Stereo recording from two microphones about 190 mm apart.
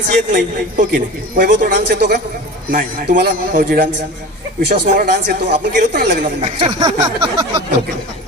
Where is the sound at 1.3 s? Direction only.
50° right (ahead or behind).